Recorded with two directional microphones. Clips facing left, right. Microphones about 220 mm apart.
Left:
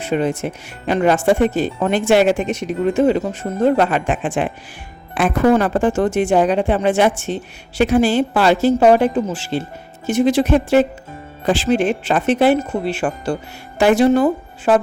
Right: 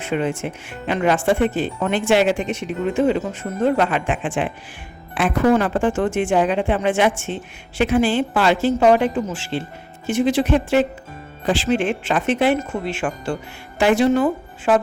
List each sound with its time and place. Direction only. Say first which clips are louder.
0.0 s speech: left 3 dB; 40° left (ahead or behind)